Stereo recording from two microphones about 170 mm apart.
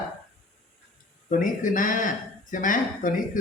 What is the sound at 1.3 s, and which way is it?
Speech, 50° left (ahead or behind).